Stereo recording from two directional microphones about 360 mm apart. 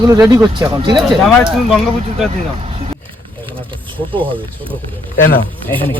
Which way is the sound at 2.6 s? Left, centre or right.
Centre.